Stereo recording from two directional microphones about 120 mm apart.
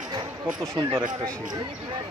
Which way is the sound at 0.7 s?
40° right (ahead or behind).